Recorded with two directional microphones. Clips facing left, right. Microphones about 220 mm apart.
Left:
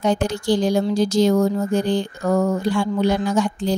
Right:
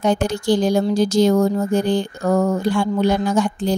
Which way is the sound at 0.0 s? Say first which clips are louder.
Right 2 dB; 50° right (ahead or behind).